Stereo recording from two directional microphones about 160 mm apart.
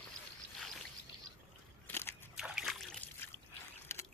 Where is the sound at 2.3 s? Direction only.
5° right (ahead or behind).